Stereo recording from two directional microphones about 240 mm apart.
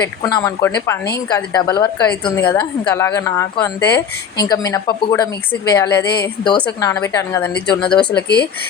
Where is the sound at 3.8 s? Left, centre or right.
Left.